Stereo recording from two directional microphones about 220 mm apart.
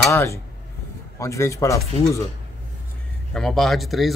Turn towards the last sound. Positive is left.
turn(degrees=0)  # may be behind; listen again after turning